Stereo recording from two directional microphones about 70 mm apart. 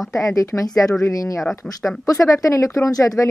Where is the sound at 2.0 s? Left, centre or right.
Left.